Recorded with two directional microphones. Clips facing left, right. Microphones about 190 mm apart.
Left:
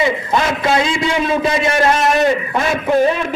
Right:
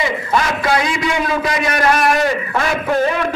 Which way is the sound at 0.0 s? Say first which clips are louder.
Left 2 dB; 25° left (ahead or behind).